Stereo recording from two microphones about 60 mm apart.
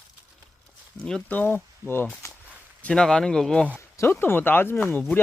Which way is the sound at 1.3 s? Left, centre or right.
Left.